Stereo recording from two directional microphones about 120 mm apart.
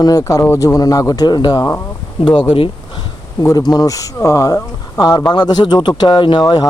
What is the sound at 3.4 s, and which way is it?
Speech, 30° left (ahead or behind).